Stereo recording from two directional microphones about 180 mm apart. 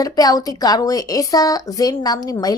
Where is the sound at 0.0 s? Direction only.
20° left (ahead or behind).